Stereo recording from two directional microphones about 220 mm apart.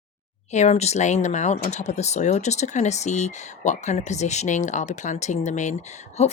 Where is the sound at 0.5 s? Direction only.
30° left (ahead or behind).